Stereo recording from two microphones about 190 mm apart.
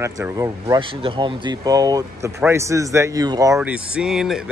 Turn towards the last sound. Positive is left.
turn(degrees=0)  # may be behind; listen again after turning